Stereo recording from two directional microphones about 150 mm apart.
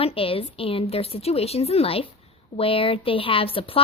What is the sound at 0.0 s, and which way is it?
A woman's voice, 40° left (ahead or behind).